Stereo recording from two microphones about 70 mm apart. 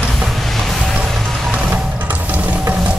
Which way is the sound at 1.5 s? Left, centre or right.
Right.